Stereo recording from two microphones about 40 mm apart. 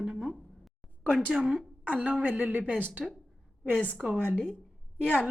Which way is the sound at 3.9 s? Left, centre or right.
Centre.